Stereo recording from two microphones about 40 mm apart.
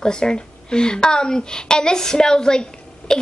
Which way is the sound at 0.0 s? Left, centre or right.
Centre.